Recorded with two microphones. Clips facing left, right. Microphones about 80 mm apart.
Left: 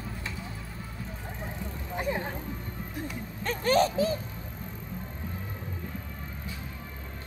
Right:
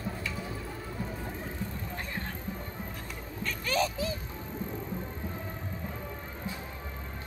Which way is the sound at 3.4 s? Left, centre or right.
Left.